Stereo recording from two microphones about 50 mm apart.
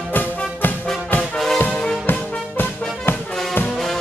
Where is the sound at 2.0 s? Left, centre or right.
Left.